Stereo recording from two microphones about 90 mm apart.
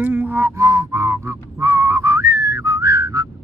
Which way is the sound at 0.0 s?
20° right (ahead or behind).